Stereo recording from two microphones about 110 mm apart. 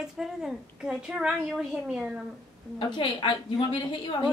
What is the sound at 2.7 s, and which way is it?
A woman's voice, 50° left (ahead or behind).